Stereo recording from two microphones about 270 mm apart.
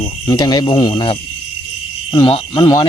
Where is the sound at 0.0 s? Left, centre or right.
Centre.